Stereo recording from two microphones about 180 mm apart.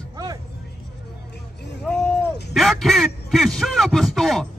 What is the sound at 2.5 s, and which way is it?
A man's voice, centre (ahead or behind).